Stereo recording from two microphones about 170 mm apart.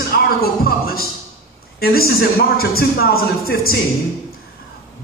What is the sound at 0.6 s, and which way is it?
Speech, 60° left (ahead or behind).